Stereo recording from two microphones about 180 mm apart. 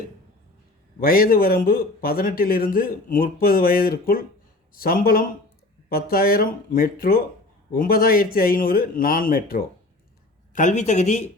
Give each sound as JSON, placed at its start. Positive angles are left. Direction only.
{"t": 0.9, "sound": "a man's voice", "side_deg": 55}
{"t": 10.5, "sound": "speech", "side_deg": 45}